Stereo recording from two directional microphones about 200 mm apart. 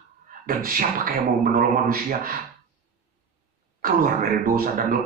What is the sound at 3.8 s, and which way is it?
Speech, 45° right (ahead or behind).